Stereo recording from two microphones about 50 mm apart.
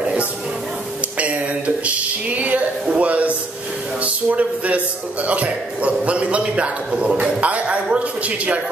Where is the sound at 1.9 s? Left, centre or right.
Right.